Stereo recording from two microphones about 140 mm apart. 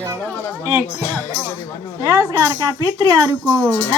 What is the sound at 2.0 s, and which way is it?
Speech, 25° right (ahead or behind).